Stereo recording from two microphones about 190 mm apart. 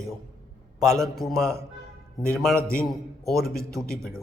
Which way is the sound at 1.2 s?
Centre (ahead or behind).